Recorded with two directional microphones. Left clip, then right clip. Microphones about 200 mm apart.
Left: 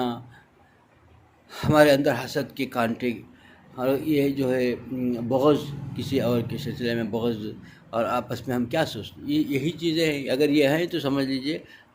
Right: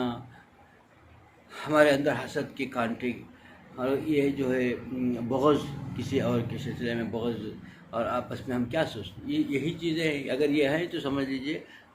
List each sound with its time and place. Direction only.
1.5 s speech: 50° left (ahead or behind)